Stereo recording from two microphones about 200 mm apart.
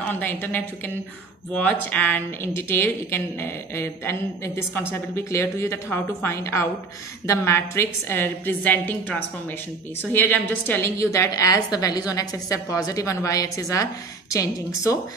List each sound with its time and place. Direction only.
0.0 s a woman's voice: 10° left (ahead or behind)